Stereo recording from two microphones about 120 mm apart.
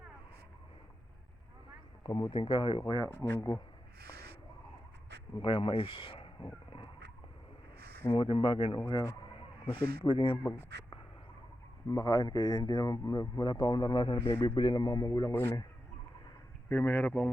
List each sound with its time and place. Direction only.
2.3 s speech: 45° left (ahead or behind)
5.4 s speech: 45° left (ahead or behind)
8.1 s speech: 45° left (ahead or behind)
8.8 s speech: 35° left (ahead or behind)
9.4 s speech: 50° left (ahead or behind)
10.3 s speech: 20° left (ahead or behind)
11.9 s speech: 30° left (ahead or behind)
14.2 s speech: 25° left (ahead or behind)
14.4 s speech: 40° left (ahead or behind)
15.3 s speech: 15° left (ahead or behind)
16.6 s speech: 15° left (ahead or behind)